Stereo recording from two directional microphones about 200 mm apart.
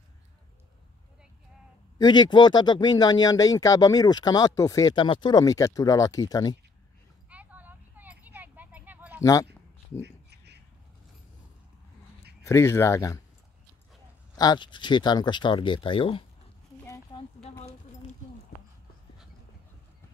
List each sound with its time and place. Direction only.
2.0 s speech: 20° left (ahead or behind)
7.2 s vehicle: 5° right (ahead or behind)
9.2 s speech: 15° left (ahead or behind)
10.0 s a sound: 55° right (ahead or behind)
12.4 s speech: 15° left (ahead or behind)
14.3 s speech: 20° left (ahead or behind)
16.8 s a sound: 15° left (ahead or behind)